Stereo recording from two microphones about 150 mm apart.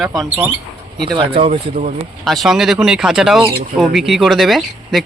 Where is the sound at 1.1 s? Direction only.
35° right (ahead or behind).